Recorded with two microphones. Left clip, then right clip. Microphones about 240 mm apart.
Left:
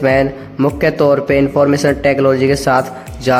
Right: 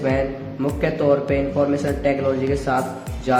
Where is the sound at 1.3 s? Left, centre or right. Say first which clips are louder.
Left 8 dB; left.